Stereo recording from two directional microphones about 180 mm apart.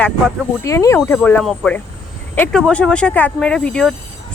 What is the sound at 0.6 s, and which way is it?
A woman's voice, 15° left (ahead or behind).